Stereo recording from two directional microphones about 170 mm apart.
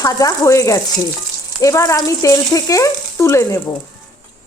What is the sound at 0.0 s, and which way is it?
Frying, 20° left (ahead or behind).